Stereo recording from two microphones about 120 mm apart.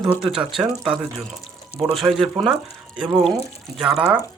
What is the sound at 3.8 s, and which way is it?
Speech, 5° right (ahead or behind).